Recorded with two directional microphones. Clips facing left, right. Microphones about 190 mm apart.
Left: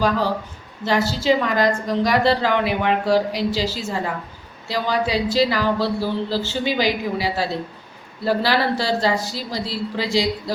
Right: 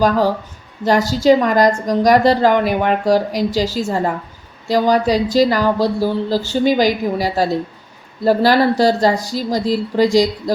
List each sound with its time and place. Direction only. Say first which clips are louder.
0.9 s a woman's voice: right 6 dB; 45° right (ahead or behind)